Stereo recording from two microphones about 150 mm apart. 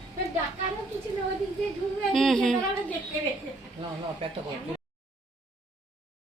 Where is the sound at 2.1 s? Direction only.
Centre (ahead or behind).